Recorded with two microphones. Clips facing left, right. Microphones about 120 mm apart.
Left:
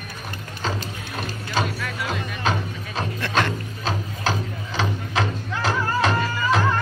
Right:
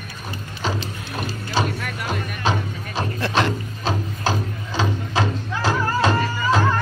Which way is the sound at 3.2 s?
20° right (ahead or behind).